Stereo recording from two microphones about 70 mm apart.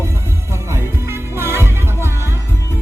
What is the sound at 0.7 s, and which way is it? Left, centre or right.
Music, right.